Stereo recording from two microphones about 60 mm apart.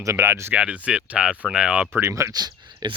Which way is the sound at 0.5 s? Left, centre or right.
Right.